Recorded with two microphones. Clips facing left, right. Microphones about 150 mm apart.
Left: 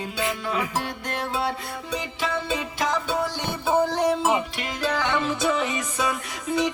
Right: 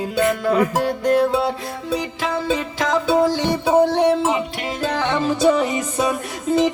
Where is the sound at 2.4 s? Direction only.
90° right.